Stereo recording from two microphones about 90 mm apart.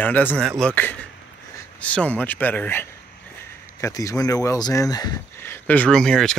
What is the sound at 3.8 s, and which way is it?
Speech, 35° left (ahead or behind).